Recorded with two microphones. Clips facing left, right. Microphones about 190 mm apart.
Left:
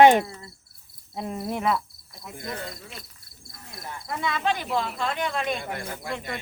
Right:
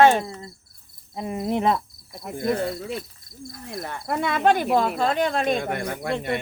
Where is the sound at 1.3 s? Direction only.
20° right (ahead or behind).